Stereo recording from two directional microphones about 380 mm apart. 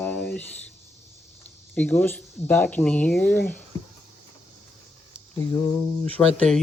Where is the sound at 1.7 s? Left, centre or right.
Centre.